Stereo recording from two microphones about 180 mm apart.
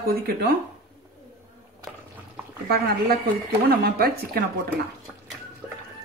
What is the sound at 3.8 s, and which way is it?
Speech, 55° right (ahead or behind).